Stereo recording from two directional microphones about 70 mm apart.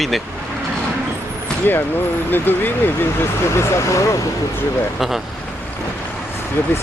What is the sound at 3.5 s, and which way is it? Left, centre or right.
Speech, left.